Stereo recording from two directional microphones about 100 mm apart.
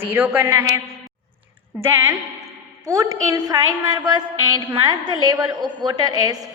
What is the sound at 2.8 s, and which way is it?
A woman's voice, 35° right (ahead or behind).